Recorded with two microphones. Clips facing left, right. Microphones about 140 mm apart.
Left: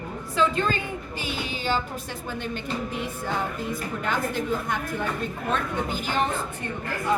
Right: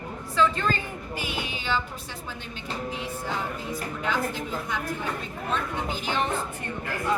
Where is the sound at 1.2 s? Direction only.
35° left (ahead or behind).